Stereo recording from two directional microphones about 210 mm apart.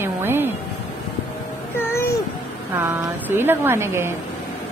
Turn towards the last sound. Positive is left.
turn(degrees=-10)  # may be behind; listen again after turning